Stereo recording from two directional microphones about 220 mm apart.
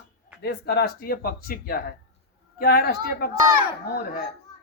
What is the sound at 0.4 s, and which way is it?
Speech, 45° left (ahead or behind).